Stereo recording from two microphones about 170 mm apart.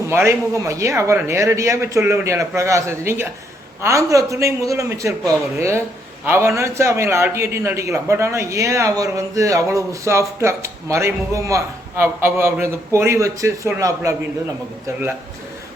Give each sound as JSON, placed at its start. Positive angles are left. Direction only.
{"t": 0.1, "sound": "a man's voice", "side_deg": -15}